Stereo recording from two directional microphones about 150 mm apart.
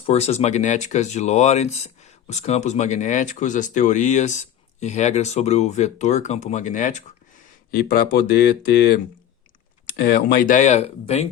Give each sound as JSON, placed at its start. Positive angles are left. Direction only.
{"t": 0.0, "sound": "speech", "side_deg": 45}
{"t": 8.3, "sound": "speech", "side_deg": 90}